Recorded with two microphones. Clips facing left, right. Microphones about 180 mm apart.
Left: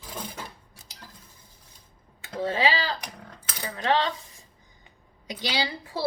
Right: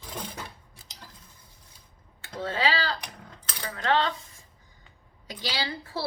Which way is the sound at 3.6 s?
15° left (ahead or behind).